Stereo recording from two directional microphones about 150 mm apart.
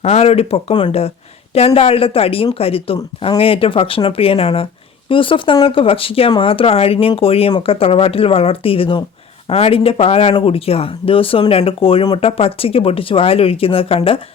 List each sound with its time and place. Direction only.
0.0 s speech: 45° left (ahead or behind)